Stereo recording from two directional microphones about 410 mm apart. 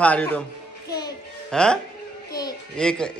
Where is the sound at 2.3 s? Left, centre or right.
Centre.